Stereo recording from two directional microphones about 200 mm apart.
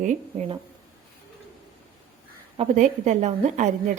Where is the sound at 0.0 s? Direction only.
35° right (ahead or behind).